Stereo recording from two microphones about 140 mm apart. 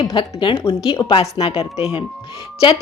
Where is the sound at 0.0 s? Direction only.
35° left (ahead or behind).